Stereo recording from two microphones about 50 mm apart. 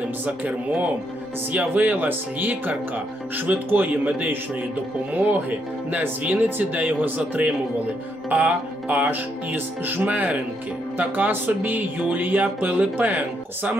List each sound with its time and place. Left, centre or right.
0.2 s speech: right